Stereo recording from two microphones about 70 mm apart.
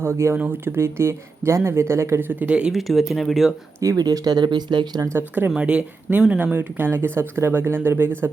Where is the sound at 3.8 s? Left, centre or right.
Right.